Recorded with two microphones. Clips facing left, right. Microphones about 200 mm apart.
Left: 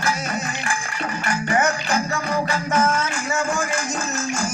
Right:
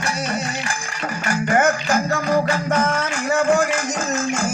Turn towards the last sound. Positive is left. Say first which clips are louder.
# right 1 dB
turn(degrees=-40)  # may be behind; listen again after turning